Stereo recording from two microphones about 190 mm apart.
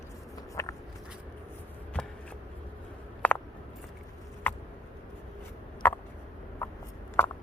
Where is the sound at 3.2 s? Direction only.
10° left (ahead or behind).